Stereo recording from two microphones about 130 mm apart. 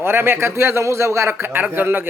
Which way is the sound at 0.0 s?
20° right (ahead or behind).